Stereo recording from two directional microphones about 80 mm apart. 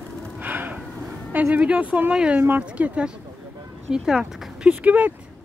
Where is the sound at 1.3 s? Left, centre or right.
Centre.